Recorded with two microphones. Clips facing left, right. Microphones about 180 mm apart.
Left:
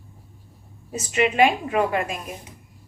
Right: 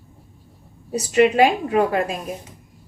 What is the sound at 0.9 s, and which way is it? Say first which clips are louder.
Speech: right 6 dB; 35° right (ahead or behind).